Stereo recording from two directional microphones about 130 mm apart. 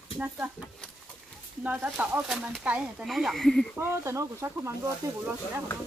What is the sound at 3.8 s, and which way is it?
Speech, 20° right (ahead or behind).